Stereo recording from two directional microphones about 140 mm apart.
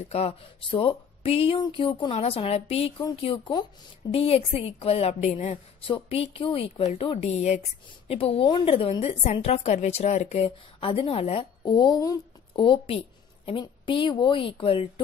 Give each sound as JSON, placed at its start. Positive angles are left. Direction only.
{"t": 0.0, "sound": "a woman's voice", "side_deg": 50}
{"t": 10.8, "sound": "a woman's voice", "side_deg": 40}
{"t": 11.6, "sound": "a woman's voice", "side_deg": 30}